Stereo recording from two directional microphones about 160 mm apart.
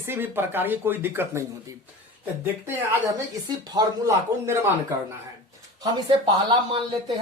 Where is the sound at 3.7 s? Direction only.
20° right (ahead or behind).